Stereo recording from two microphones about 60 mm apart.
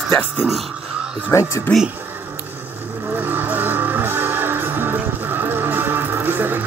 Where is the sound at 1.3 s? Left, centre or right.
Left.